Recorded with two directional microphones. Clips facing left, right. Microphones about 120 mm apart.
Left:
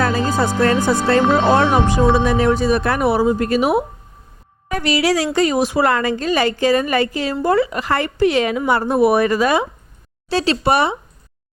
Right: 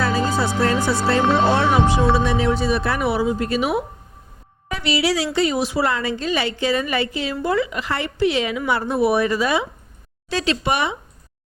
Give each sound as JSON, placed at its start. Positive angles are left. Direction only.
{"t": 0.0, "sound": "a woman's voice", "side_deg": 50}
{"t": 10.2, "sound": "speech", "side_deg": 35}